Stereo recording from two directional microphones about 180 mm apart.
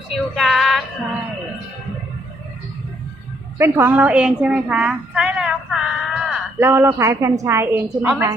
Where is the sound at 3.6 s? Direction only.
15° right (ahead or behind).